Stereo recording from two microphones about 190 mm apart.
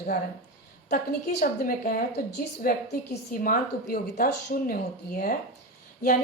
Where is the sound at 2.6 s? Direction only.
50° left (ahead or behind).